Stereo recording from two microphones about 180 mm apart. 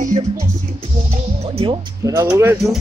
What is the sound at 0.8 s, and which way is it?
Speech, 35° right (ahead or behind).